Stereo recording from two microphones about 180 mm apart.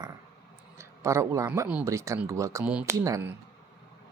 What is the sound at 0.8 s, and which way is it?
Speech, 15° right (ahead or behind).